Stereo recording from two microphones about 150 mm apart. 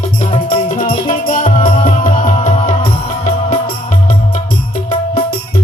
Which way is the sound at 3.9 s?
40° left (ahead or behind).